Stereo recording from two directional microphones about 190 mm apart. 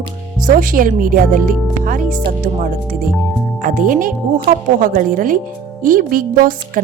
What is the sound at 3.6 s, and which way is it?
Speech, 45° right (ahead or behind).